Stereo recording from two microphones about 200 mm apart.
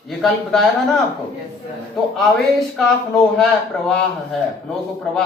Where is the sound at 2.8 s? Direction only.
5° left (ahead or behind).